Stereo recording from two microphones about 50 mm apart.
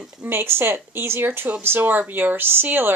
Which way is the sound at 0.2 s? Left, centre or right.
Right.